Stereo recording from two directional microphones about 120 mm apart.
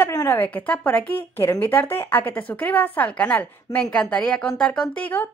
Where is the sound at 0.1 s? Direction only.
30° left (ahead or behind).